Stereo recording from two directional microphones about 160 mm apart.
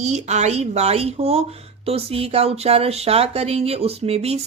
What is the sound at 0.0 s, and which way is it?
Speech, 45° right (ahead or behind).